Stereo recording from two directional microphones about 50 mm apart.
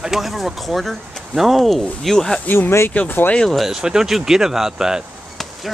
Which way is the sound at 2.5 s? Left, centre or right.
Left.